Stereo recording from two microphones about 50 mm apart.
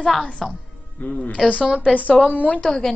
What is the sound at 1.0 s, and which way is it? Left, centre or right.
A woman's voice, left.